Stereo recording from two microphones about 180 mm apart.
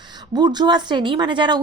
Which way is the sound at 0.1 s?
25° right (ahead or behind).